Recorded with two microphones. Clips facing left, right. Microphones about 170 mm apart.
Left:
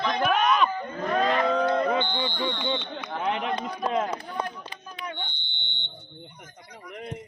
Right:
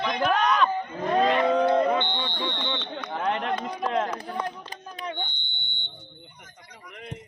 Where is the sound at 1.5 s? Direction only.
10° right (ahead or behind).